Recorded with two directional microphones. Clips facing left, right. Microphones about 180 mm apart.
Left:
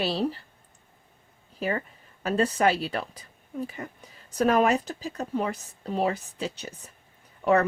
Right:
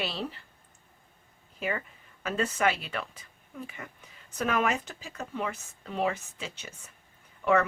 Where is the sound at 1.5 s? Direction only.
35° left (ahead or behind).